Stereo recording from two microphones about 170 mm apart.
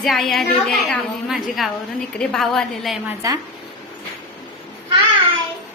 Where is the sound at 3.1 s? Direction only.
20° right (ahead or behind).